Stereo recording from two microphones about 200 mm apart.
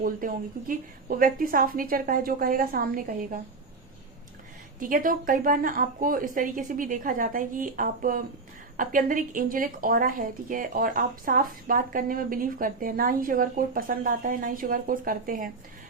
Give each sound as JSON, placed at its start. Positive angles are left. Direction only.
{"t": 0.0, "sound": "a woman's voice", "side_deg": -45}
{"t": 4.8, "sound": "a woman's voice", "side_deg": -40}